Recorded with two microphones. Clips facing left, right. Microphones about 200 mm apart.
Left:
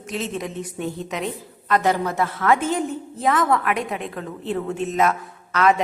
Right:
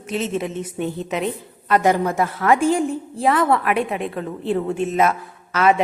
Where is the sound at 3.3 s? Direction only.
30° right (ahead or behind).